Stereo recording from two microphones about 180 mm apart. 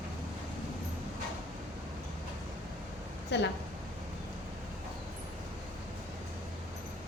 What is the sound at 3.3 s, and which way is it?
Speech, 75° left (ahead or behind).